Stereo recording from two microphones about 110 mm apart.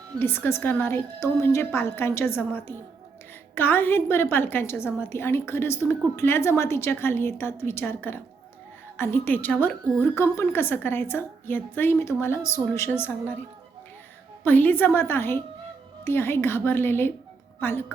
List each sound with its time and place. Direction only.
0.2 s a woman's voice: 20° left (ahead or behind)
14.4 s a woman's voice: 15° left (ahead or behind)